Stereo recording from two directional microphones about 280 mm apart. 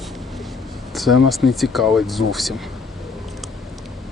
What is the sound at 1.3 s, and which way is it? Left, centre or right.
Speech, centre.